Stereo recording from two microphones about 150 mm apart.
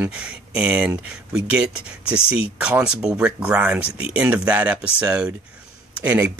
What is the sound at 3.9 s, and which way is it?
Speech, 40° left (ahead or behind).